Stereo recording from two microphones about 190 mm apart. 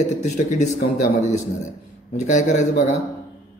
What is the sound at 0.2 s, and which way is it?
A man's voice, 40° left (ahead or behind).